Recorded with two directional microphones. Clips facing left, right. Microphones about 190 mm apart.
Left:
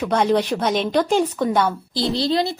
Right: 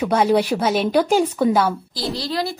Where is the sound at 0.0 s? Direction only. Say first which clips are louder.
Right 1 dB; 10° right (ahead or behind).